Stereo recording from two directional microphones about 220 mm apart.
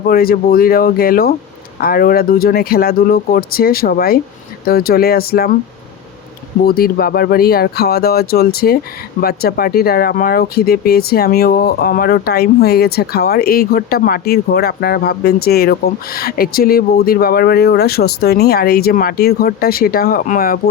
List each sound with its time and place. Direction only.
0.1 s speech: 40° left (ahead or behind)
6.7 s speech: 45° left (ahead or behind)